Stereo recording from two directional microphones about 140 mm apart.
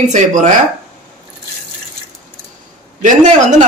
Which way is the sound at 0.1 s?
60° right (ahead or behind).